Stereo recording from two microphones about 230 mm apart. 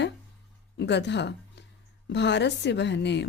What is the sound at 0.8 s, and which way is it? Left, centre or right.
Speech, left.